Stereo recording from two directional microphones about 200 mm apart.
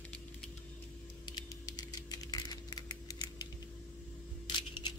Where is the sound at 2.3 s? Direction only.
20° left (ahead or behind).